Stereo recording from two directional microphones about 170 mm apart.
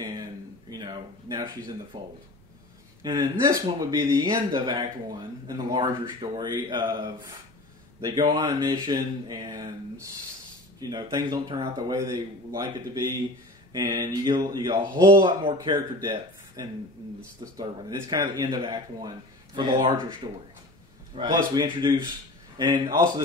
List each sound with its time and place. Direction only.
0.0 s a sound: 20° right (ahead or behind)
3.0 s speech: 25° right (ahead or behind)
10.8 s speech: 25° right (ahead or behind)